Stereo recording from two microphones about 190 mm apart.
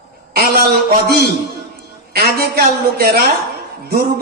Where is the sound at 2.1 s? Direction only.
55° right (ahead or behind).